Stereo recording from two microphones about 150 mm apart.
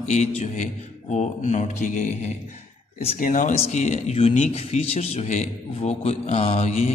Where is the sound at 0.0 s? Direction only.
50° left (ahead or behind).